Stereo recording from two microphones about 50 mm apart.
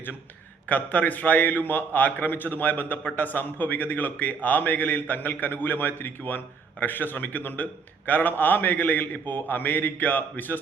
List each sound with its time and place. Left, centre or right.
0.7 s a man's voice: left